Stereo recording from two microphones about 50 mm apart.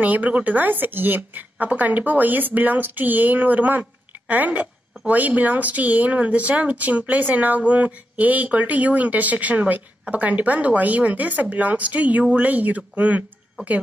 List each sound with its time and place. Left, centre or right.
0.0 s a woman's voice: right